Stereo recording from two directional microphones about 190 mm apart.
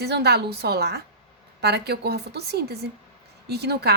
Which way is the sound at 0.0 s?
60° right (ahead or behind).